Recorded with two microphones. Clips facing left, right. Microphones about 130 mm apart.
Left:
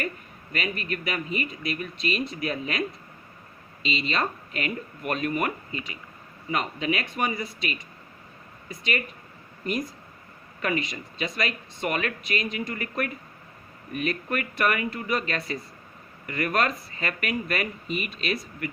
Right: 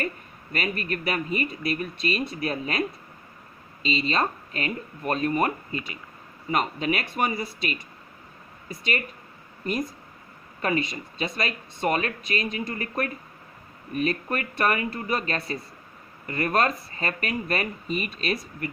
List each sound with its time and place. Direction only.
0.5 s speech: 40° right (ahead or behind)
3.8 s speech: 40° right (ahead or behind)
10.6 s speech: 35° right (ahead or behind)